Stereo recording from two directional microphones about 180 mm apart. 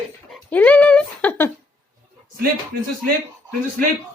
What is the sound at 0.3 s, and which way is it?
Dog, 5° left (ahead or behind).